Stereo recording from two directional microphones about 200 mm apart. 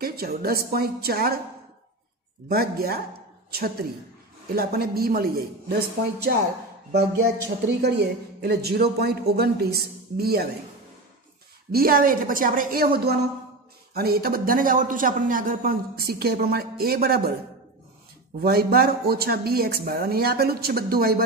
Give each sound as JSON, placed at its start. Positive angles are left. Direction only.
{"t": 0.0, "sound": "a man's voice", "side_deg": -50}
{"t": 2.5, "sound": "a man's voice", "side_deg": -50}
{"t": 6.9, "sound": "a man's voice", "side_deg": -55}
{"t": 11.7, "sound": "a man's voice", "side_deg": -45}
{"t": 18.4, "sound": "a man's voice", "side_deg": -50}